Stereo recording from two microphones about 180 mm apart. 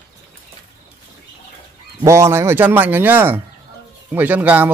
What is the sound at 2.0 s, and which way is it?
Speech, 15° right (ahead or behind).